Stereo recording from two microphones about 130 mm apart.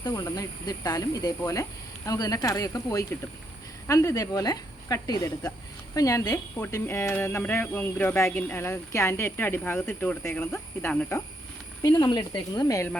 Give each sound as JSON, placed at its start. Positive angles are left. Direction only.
{"t": 0.0, "sound": "speech", "side_deg": 25}
{"t": 11.8, "sound": "speech", "side_deg": 35}